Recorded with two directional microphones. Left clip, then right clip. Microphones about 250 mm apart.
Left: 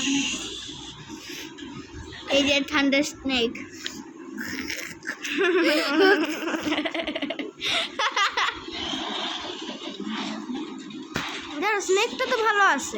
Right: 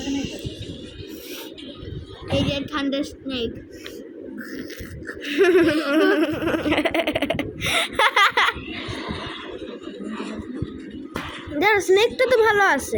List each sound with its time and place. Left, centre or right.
0.0 s music: left
2.3 s speech: left
4.4 s a sound: left
5.2 s laughter: centre
5.6 s speech: left
6.1 s laughter: centre
9.1 s vehicle: centre
11.3 s speech: centre